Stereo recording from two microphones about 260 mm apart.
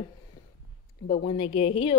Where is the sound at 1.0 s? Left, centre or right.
Left.